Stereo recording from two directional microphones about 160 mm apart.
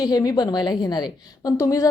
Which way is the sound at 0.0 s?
25° left (ahead or behind).